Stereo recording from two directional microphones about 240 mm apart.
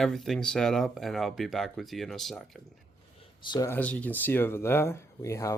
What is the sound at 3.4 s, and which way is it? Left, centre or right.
Speech, centre.